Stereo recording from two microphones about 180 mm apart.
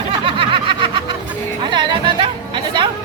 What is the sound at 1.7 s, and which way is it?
Music, 25° right (ahead or behind).